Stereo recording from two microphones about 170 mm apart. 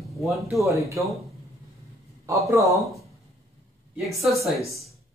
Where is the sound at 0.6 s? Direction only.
15° right (ahead or behind).